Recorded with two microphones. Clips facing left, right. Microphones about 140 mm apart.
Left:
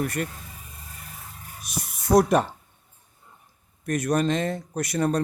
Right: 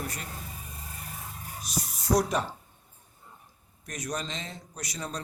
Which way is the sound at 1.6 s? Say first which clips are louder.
Left 2 dB; 55° left (ahead or behind).